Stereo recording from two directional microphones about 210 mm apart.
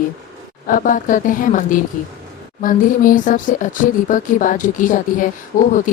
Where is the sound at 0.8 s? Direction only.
40° left (ahead or behind).